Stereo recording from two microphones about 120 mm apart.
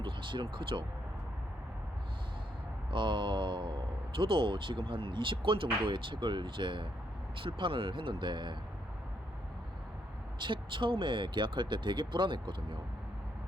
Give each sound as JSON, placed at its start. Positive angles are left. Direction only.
{"t": 0.0, "sound": "speech", "side_deg": -45}
{"t": 2.9, "sound": "speech", "side_deg": -40}
{"t": 10.4, "sound": "speech", "side_deg": -40}